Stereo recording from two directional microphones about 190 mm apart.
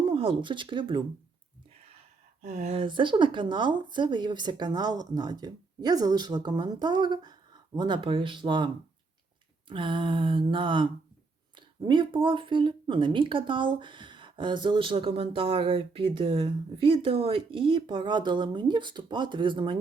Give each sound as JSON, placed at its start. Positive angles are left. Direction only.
{"t": 0.1, "sound": "speech", "side_deg": -30}
{"t": 2.4, "sound": "speech", "side_deg": -50}
{"t": 2.6, "sound": "speech", "side_deg": -30}